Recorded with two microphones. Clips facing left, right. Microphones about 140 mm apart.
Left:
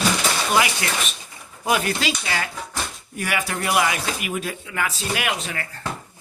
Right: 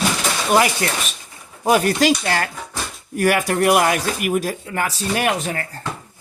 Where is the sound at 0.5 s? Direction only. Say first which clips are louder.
Right 7 dB; 40° right (ahead or behind).